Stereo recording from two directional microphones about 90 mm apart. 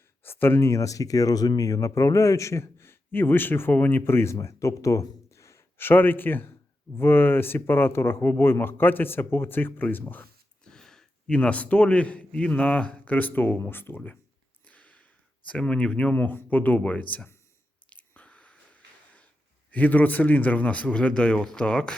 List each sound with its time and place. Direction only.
0.2 s speech: 25° left (ahead or behind)
10.6 s a man's voice: 5° left (ahead or behind)
14.7 s a sound: 15° left (ahead or behind)
15.4 s speech: 10° left (ahead or behind)
17.8 s a sound: 15° left (ahead or behind)
19.7 s speech: 20° left (ahead or behind)